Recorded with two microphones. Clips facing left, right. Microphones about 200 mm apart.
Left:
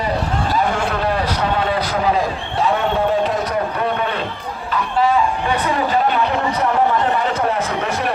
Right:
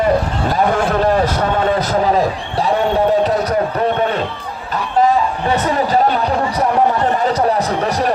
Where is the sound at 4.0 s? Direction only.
40° right (ahead or behind).